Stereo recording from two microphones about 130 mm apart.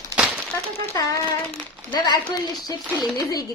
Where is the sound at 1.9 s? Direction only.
35° left (ahead or behind).